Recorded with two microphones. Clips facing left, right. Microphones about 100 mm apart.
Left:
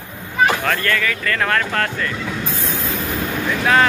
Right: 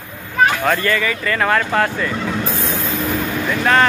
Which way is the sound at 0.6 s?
10° right (ahead or behind).